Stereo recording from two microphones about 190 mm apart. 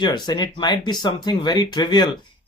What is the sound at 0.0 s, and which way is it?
Speech, 20° left (ahead or behind).